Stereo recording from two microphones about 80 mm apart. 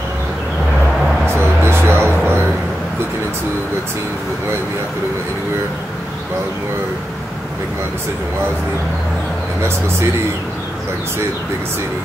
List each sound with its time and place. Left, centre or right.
1.2 s music: right